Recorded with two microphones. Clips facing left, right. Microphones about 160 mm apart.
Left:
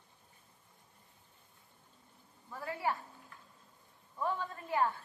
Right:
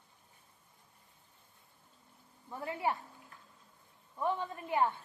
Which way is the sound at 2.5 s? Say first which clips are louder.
Right 1 dB; 25° right (ahead or behind).